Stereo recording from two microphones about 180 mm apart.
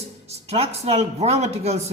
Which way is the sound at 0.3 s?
35° right (ahead or behind).